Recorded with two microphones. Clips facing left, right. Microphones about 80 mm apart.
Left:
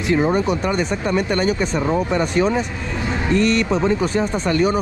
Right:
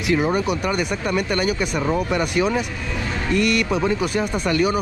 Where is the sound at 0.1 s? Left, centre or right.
Left.